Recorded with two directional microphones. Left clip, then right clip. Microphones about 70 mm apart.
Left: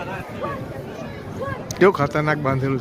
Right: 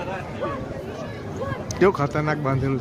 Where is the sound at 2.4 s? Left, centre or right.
Centre.